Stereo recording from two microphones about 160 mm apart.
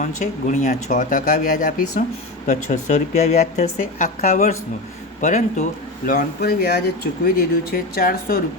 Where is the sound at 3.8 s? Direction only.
55° left (ahead or behind).